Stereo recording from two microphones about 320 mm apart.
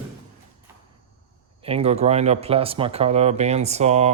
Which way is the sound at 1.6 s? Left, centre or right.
Centre.